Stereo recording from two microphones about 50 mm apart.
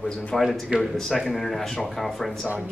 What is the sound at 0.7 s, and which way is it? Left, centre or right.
Speech, centre.